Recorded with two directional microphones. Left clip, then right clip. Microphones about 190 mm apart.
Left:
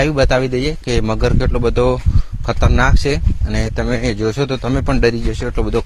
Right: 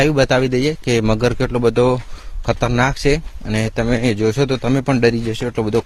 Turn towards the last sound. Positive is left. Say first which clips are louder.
# right 1 dB
turn(degrees=-25)  # may be behind; listen again after turning